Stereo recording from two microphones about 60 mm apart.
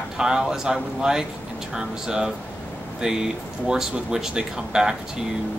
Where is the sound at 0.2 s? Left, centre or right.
Centre.